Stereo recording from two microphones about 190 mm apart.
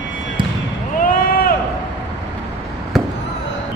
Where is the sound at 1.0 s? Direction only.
50° left (ahead or behind).